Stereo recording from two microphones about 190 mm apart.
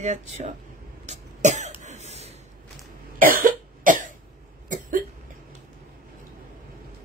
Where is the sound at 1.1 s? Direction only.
40° right (ahead or behind).